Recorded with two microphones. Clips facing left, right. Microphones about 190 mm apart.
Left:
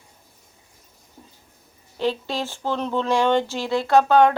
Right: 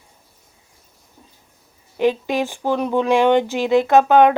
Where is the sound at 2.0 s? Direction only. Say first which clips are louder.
Right 6 dB; 15° right (ahead or behind).